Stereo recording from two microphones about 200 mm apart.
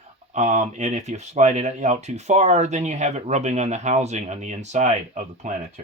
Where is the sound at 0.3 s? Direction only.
35° right (ahead or behind).